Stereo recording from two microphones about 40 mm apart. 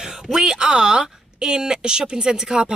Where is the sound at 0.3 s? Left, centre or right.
Centre.